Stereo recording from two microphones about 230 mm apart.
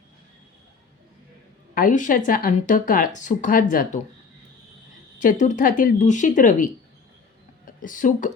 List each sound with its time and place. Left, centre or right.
1.7 s speech: left
5.2 s speech: left
7.8 s speech: left